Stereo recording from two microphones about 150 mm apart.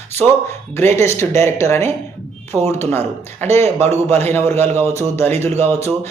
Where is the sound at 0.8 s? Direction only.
15° left (ahead or behind).